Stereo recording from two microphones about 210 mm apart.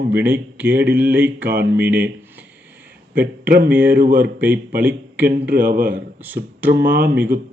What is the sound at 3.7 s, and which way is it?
Speech, 10° right (ahead or behind).